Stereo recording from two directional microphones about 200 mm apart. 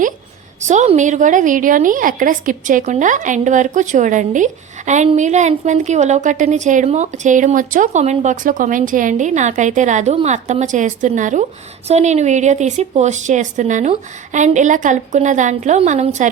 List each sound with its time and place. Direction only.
0.6 s a woman's voice: 35° right (ahead or behind)